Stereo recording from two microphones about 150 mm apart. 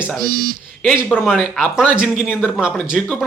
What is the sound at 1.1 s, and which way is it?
A man's voice, 5° right (ahead or behind).